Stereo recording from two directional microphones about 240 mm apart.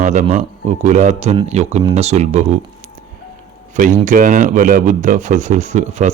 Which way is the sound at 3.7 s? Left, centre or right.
Right.